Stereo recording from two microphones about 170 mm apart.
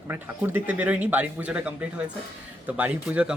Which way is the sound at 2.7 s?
10° right (ahead or behind).